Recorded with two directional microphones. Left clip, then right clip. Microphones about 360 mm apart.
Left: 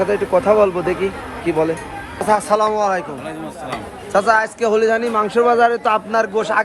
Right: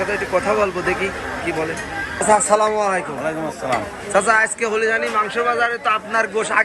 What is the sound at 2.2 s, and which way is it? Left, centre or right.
Speech, centre.